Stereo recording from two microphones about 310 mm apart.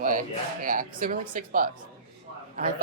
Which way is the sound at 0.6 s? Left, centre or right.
Right.